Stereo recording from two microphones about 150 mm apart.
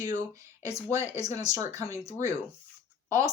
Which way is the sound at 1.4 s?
25° right (ahead or behind).